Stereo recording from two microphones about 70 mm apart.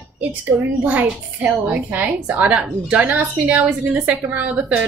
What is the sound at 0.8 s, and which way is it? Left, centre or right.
A woman's voice, right.